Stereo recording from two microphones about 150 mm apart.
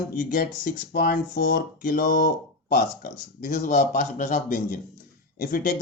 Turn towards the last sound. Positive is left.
turn(degrees=65)  # may be behind; listen again after turning